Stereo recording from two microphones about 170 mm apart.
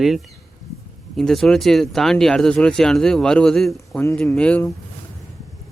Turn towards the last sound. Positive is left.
turn(degrees=10)  # may be behind; listen again after turning